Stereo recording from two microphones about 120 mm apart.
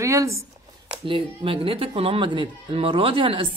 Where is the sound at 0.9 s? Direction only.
50° right (ahead or behind).